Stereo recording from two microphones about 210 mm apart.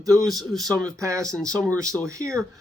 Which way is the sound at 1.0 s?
15° right (ahead or behind).